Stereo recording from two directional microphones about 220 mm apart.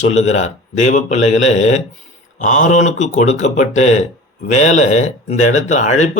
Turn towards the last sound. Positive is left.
turn(degrees=35)  # may be behind; listen again after turning